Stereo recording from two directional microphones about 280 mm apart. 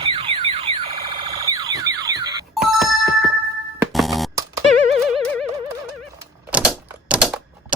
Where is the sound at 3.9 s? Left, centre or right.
Centre.